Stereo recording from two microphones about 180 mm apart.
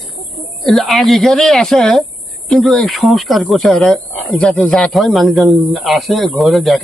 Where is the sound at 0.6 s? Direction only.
Centre (ahead or behind).